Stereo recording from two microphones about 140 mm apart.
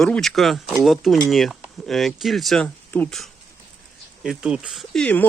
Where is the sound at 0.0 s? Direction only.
5° left (ahead or behind).